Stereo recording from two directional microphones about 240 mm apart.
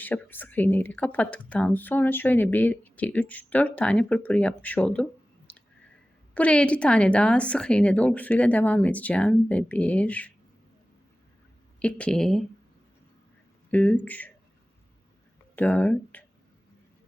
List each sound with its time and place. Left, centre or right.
0.0 s speech: centre
5.5 s clicking: centre
6.3 s a woman's voice: centre
11.8 s a woman's voice: centre
13.7 s speech: centre
15.5 s speech: centre